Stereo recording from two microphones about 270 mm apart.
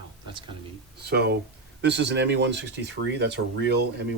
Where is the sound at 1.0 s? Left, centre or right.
Right.